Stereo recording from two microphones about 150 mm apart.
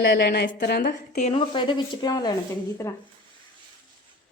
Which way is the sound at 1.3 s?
35° left (ahead or behind).